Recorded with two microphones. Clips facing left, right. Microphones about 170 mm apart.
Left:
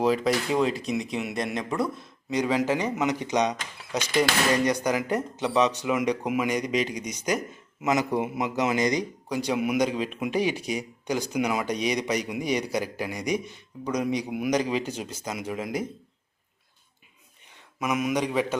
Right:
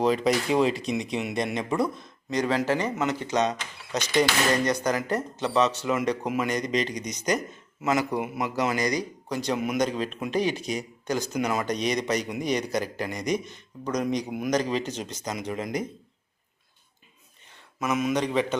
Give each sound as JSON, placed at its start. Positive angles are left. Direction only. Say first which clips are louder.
{"t": 0.0, "sound": "speech", "louder": "even", "side_deg": 5}
{"t": 2.3, "sound": "a man's voice", "louder": "even", "side_deg": 10}
{"t": 9.3, "sound": "speech", "louder": "left 1 dB", "side_deg": 10}
{"t": 17.7, "sound": "speech", "louder": "even", "side_deg": 10}